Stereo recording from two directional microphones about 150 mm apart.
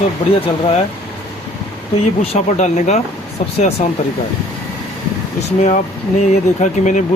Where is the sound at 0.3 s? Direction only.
40° left (ahead or behind).